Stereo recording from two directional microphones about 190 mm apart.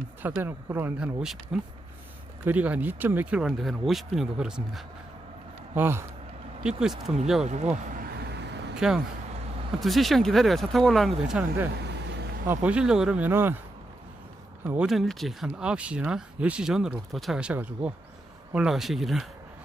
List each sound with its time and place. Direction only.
0.2 s speech: 10° right (ahead or behind)
7.4 s speech: 35° right (ahead or behind)
8.2 s vehicle: 65° right (ahead or behind)
8.7 s speech: 5° right (ahead or behind)
14.6 s speech: 10° right (ahead or behind)